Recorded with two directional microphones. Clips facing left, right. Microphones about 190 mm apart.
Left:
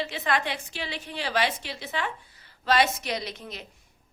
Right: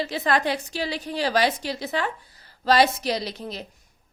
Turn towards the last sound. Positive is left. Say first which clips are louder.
# right 5 dB
turn(degrees=-35)  # may be behind; listen again after turning